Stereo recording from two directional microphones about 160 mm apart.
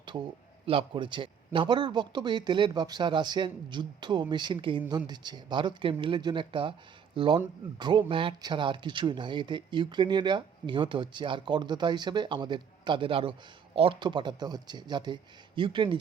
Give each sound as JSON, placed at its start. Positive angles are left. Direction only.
{"t": 0.0, "sound": "speech", "side_deg": -30}